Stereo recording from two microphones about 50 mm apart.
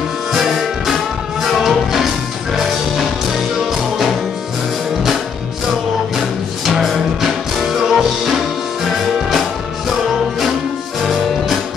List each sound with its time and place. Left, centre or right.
0.3 s music: centre
6.6 s music: centre
11.0 s music: centre